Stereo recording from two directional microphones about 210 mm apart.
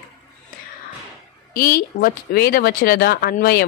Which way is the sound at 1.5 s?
40° left (ahead or behind).